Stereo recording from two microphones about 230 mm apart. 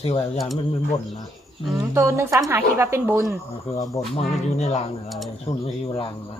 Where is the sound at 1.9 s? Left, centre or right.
Centre.